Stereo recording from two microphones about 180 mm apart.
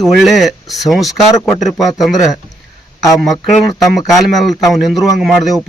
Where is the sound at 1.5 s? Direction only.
Centre (ahead or behind).